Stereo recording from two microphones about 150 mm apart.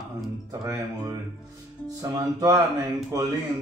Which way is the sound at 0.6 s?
25° right (ahead or behind).